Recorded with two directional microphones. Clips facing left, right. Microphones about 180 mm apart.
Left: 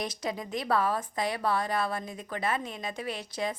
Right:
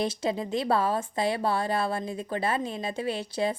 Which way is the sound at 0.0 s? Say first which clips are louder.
Right 6 dB; 30° right (ahead or behind).